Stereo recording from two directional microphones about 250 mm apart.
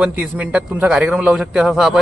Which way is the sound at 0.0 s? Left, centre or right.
Centre.